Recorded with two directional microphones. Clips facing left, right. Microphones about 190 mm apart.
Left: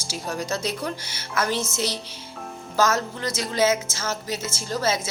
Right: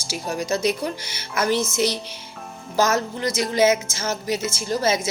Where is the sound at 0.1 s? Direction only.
10° right (ahead or behind).